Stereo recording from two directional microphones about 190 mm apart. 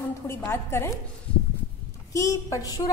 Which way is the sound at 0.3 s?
10° left (ahead or behind).